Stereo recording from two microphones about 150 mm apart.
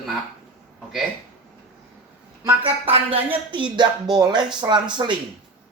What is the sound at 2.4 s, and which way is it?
Speech, 35° right (ahead or behind).